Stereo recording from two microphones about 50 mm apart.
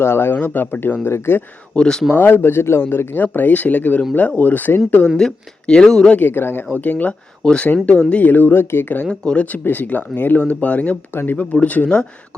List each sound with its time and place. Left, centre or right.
0.0 s speech: left
0.3 s speech: left
1.0 s speech: left
1.7 s speech: centre
2.1 s speech: left
3.3 s speech: left
5.0 s speech: centre
6.1 s speech: left
6.7 s speech: left
7.4 s speech: centre
7.9 s speech: left
9.3 s speech: left
11.1 s speech: left
11.6 s speech: left